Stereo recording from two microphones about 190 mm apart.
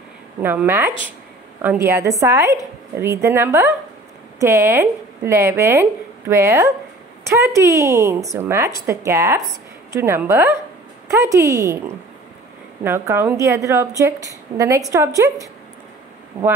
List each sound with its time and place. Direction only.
0.4 s speech: 10° right (ahead or behind)
12.8 s speech: 10° right (ahead or behind)